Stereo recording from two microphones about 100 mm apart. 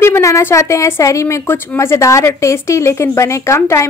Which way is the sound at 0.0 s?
30° left (ahead or behind).